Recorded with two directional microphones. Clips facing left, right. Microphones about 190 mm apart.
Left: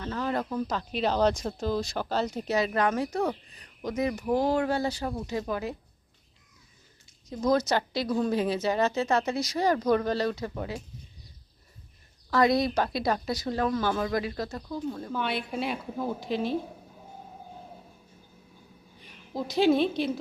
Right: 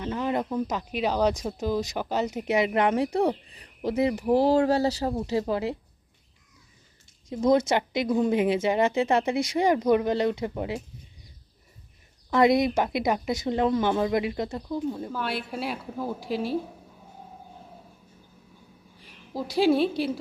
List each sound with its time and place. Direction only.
0.0 s speech: 15° right (ahead or behind)
7.3 s speech: 25° right (ahead or behind)
12.3 s a woman's voice: 20° right (ahead or behind)
19.0 s a woman's voice: 10° right (ahead or behind)